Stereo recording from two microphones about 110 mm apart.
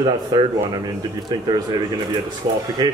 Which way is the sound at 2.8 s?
35° right (ahead or behind).